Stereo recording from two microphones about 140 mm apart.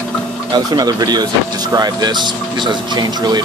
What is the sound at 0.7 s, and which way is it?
Speech, 30° right (ahead or behind).